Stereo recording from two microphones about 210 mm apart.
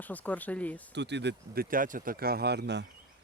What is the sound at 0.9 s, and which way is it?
Speech, 55° right (ahead or behind).